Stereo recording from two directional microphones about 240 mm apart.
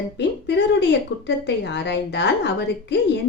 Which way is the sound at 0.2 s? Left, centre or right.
Left.